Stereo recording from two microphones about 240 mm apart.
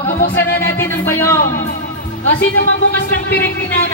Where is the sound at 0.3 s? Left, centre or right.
Left.